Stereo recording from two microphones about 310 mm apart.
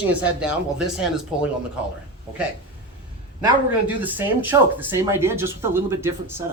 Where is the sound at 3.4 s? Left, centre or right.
Centre.